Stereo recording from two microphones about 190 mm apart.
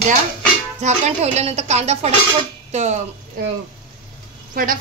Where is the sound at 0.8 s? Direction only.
35° right (ahead or behind).